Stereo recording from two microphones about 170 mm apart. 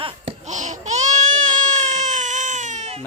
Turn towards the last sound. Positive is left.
turn(degrees=-40)  # may be behind; listen again after turning